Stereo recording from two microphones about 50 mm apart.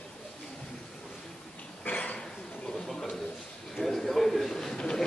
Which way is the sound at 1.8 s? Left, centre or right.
Left.